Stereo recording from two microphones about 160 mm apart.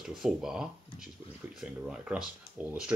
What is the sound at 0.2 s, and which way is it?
Speech, 5° right (ahead or behind).